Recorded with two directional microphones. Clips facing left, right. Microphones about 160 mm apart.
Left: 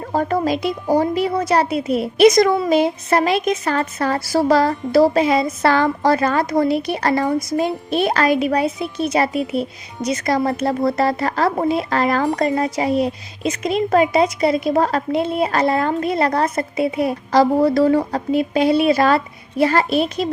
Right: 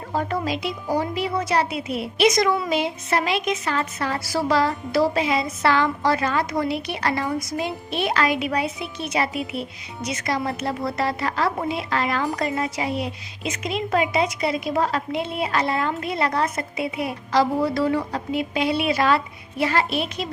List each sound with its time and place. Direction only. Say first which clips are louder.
0.1 s speech: left 6 dB; 45° left (ahead or behind)